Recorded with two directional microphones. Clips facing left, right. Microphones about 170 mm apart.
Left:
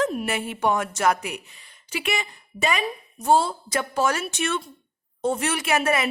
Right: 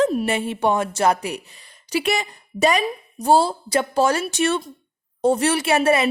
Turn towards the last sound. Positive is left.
turn(degrees=-30)  # may be behind; listen again after turning